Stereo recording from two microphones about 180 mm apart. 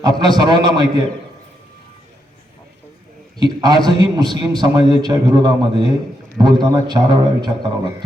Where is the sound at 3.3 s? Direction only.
25° right (ahead or behind).